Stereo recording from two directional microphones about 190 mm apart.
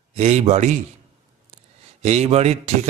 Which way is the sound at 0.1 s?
35° right (ahead or behind).